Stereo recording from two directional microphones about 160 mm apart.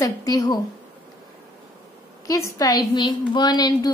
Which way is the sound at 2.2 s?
20° left (ahead or behind).